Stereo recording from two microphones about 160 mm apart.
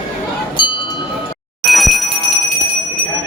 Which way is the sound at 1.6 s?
Centre (ahead or behind).